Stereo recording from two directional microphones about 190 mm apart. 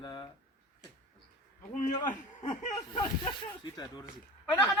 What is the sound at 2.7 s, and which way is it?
Speech, 25° left (ahead or behind).